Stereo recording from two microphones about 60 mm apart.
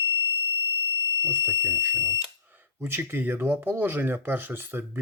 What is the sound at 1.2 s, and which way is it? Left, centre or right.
Speech, right.